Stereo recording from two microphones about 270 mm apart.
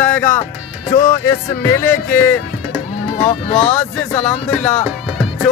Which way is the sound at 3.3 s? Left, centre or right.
Left.